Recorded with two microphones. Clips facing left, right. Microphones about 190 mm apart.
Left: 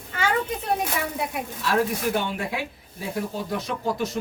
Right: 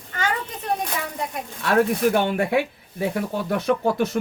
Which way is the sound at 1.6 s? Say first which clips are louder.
Right 5 dB; 60° right (ahead or behind).